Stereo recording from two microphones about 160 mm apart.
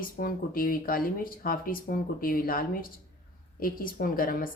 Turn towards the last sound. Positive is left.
turn(degrees=65)  # may be behind; listen again after turning